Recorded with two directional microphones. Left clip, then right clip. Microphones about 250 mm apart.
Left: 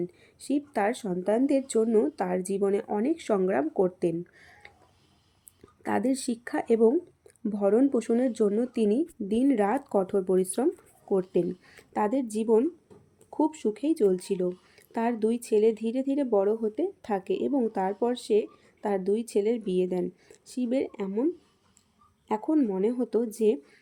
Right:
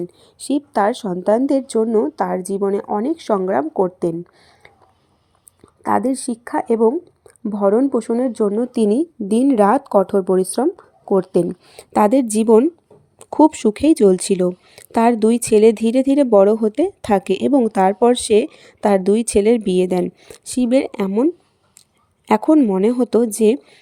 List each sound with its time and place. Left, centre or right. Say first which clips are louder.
0.3 s speech: right 10 dB; right
1.4 s speech: right 8 dB; centre
1.6 s speech: right 7 dB; centre
1.9 s speech: right 8 dB; centre
5.8 s speech: right 10 dB; centre
8.7 s speech: right 9 dB; right
22.3 s speech: right 13 dB; right